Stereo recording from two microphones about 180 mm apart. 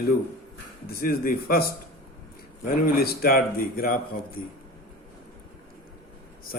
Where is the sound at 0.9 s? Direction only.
55° left (ahead or behind).